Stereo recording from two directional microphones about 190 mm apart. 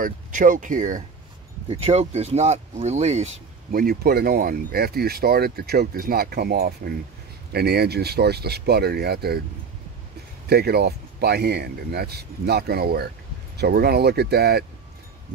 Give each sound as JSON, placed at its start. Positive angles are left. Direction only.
{"t": 0.0, "sound": "speech", "side_deg": -45}
{"t": 1.7, "sound": "speech", "side_deg": -30}
{"t": 3.7, "sound": "speech", "side_deg": -55}
{"t": 10.5, "sound": "speech", "side_deg": -55}